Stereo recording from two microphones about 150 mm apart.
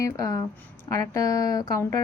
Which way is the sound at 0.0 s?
20° left (ahead or behind).